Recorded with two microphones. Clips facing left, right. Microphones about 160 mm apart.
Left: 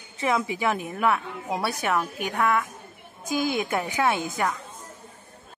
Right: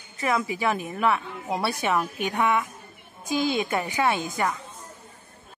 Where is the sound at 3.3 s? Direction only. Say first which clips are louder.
Right 1 dB; 10° left (ahead or behind).